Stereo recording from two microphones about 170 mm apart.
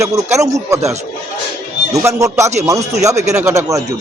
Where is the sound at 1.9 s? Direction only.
20° right (ahead or behind).